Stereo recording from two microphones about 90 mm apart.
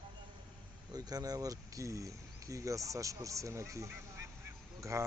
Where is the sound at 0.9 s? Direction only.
45° right (ahead or behind).